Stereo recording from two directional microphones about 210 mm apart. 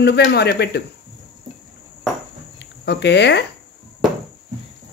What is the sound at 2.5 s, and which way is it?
Speech, 55° left (ahead or behind).